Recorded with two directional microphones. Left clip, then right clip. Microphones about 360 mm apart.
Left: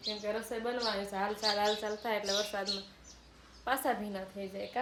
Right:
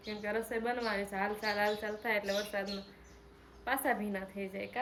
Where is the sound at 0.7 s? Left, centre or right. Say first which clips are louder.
Left 1 dB; centre.